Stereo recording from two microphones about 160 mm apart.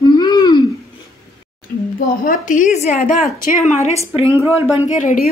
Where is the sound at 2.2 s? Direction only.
60° left (ahead or behind).